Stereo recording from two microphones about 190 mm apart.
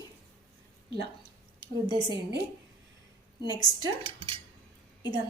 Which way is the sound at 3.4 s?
20° left (ahead or behind).